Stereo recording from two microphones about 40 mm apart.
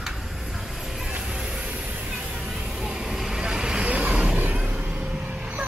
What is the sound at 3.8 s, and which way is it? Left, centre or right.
Vehicle, right.